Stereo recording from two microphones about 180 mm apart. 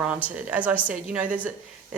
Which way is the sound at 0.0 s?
5° right (ahead or behind).